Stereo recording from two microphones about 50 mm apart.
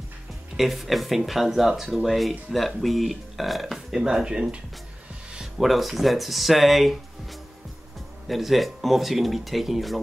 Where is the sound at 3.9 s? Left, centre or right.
Centre.